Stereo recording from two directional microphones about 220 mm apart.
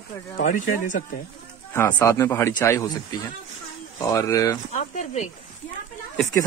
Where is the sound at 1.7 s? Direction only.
10° left (ahead or behind).